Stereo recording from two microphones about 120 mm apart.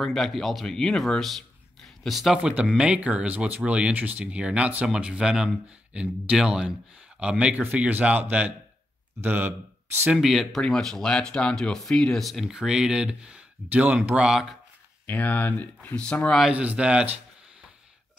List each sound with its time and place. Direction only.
0.0 s speech: centre (ahead or behind); by 9.5 s 15° right (ahead or behind)
10.1 s speech: centre (ahead or behind)
15.0 s speech: 15° left (ahead or behind)
16.4 s speech: 10° right (ahead or behind)